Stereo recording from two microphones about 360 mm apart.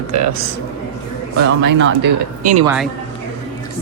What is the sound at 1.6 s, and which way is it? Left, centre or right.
Speech, right.